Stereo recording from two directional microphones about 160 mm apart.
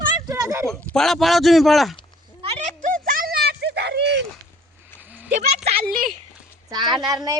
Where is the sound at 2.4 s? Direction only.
40° right (ahead or behind); by 4.2 s 90° right.